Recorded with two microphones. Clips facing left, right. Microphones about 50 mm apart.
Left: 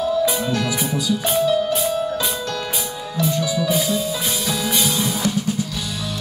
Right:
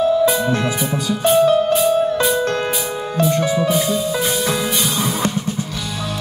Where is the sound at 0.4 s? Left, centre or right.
Right.